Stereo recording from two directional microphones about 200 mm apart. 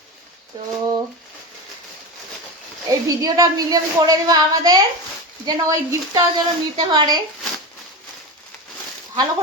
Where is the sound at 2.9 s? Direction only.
15° right (ahead or behind).